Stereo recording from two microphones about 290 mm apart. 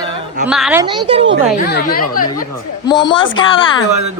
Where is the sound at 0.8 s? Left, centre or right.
Centre.